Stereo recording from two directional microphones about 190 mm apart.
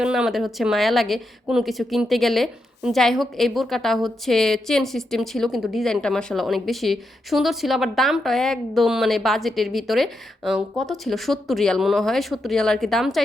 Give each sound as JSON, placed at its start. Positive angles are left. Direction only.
{"t": 0.0, "sound": "a woman's voice", "side_deg": -5}